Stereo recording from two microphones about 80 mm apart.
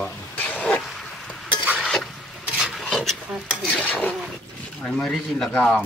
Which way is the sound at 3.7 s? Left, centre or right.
Centre.